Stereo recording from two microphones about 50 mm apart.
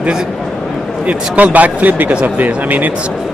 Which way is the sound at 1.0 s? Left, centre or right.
Right.